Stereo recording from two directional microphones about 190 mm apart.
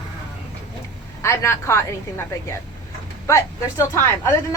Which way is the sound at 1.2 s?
15° left (ahead or behind).